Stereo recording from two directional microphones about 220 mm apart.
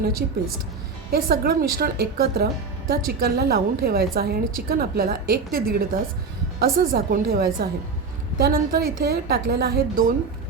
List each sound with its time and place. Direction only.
1.1 s a woman's voice: 45° right (ahead or behind)